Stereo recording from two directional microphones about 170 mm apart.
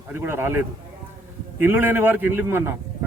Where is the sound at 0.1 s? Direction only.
15° right (ahead or behind).